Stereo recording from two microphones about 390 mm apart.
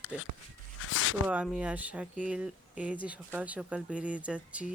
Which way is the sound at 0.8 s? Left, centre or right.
Left.